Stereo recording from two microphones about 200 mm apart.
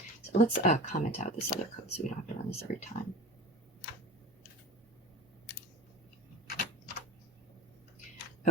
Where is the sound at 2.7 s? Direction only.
40° left (ahead or behind).